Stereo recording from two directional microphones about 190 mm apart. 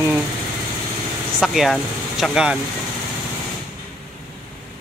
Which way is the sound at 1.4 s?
Centre (ahead or behind).